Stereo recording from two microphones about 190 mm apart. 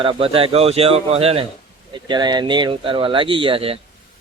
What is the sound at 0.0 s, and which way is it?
A man's voice, 30° right (ahead or behind).